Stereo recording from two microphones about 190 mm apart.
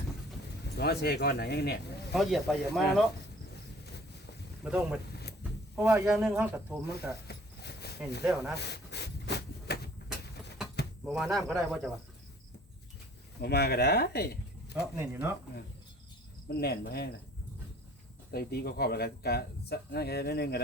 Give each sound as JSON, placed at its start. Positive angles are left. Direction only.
{"t": 0.6, "sound": "speech", "side_deg": 60}
{"t": 2.1, "sound": "speech", "side_deg": 0}
{"t": 4.6, "sound": "speech", "side_deg": -5}
{"t": 7.3, "sound": "a sound", "side_deg": 60}
{"t": 8.2, "sound": "speech", "side_deg": 0}
{"t": 8.5, "sound": "a sound", "side_deg": 60}
{"t": 11.0, "sound": "speech", "side_deg": -5}
{"t": 13.4, "sound": "speech", "side_deg": 60}
{"t": 14.8, "sound": "speech", "side_deg": -10}
{"t": 16.5, "sound": "speech", "side_deg": 55}
{"t": 18.3, "sound": "speech", "side_deg": 55}